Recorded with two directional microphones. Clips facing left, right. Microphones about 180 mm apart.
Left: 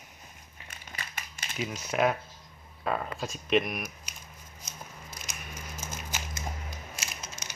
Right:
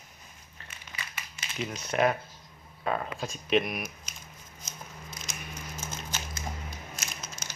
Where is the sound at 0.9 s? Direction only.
50° left (ahead or behind).